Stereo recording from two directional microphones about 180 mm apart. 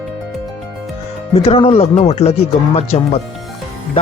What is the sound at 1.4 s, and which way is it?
Speech, 30° left (ahead or behind).